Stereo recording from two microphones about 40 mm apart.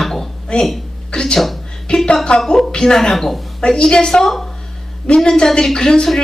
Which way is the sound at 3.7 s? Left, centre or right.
Centre.